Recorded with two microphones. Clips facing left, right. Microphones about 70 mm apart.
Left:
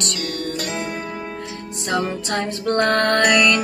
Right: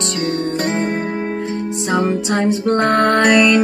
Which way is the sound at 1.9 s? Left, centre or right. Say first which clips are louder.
Right 4 dB; right.